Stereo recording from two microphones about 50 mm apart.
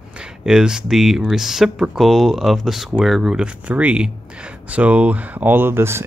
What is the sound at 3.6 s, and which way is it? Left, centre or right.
Speech, right.